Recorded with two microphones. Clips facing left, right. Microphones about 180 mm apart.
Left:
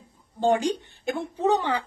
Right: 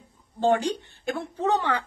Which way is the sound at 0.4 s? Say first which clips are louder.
Even; 15° left (ahead or behind).